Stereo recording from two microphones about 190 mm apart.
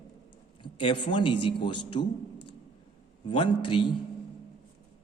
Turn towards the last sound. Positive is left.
turn(degrees=25)  # may be behind; listen again after turning